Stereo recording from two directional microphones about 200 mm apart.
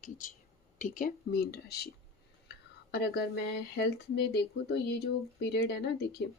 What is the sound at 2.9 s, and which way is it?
Speech, 55° left (ahead or behind).